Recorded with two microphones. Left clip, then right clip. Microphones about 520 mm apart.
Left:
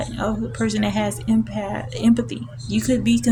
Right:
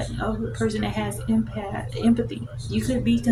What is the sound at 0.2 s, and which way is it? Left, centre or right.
A woman's voice, centre.